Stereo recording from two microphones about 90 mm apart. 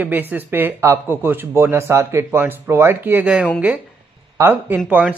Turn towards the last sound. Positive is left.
turn(degrees=-15)  # may be behind; listen again after turning